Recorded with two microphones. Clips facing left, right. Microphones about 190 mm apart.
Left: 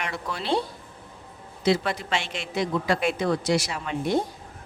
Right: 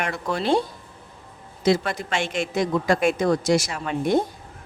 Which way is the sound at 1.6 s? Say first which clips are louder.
Right 2 dB; 45° right (ahead or behind).